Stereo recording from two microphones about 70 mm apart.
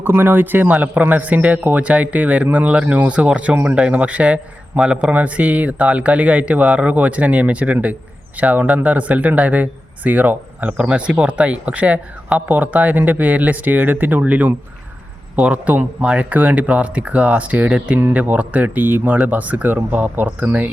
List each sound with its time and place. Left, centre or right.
0.0 s a man's voice: right